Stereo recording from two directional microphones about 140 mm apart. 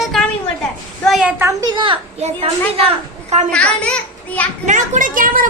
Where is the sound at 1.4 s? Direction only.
25° right (ahead or behind).